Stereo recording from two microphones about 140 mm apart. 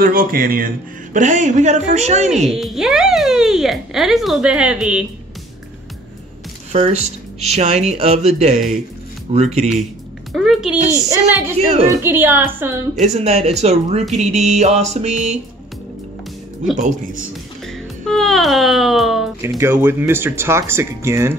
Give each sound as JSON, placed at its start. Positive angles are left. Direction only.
{"t": 0.0, "sound": "speech", "side_deg": -90}
{"t": 2.2, "sound": "speech", "side_deg": 0}
{"t": 6.7, "sound": "music", "side_deg": -50}
{"t": 10.3, "sound": "speech", "side_deg": 0}
{"t": 10.9, "sound": "a woman's voice", "side_deg": -25}
{"t": 11.5, "sound": "music", "side_deg": -50}
{"t": 11.9, "sound": "speech", "side_deg": -15}
{"t": 13.0, "sound": "music", "side_deg": -50}
{"t": 16.7, "sound": "speech", "side_deg": -60}
{"t": 17.6, "sound": "speech", "side_deg": 0}
{"t": 19.6, "sound": "speech", "side_deg": -15}